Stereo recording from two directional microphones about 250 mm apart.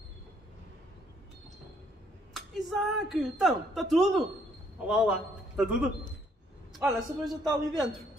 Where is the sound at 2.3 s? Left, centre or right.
Centre.